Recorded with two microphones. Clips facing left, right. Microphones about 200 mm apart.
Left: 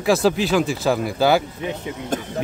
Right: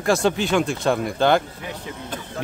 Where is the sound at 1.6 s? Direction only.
20° left (ahead or behind).